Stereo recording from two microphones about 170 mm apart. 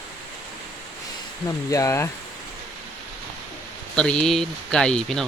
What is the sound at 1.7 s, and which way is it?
Speech, 20° left (ahead or behind).